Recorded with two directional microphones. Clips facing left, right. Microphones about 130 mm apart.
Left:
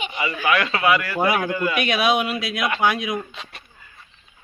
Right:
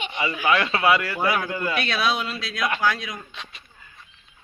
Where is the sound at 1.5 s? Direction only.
30° right (ahead or behind).